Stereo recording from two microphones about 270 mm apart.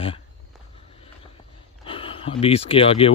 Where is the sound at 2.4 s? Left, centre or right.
Left.